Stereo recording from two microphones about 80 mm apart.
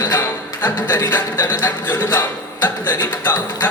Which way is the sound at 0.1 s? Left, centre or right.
Left.